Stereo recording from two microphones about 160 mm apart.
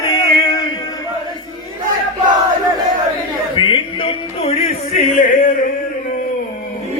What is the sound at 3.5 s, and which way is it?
Music, 30° left (ahead or behind).